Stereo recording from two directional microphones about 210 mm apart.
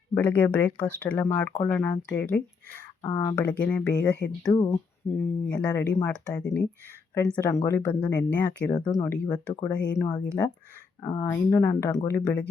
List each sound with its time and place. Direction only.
0.1 s speech: 5° left (ahead or behind)
3.0 s speech: 20° left (ahead or behind)
3.4 s speech: 5° left (ahead or behind)
8.7 s speech: 20° left (ahead or behind)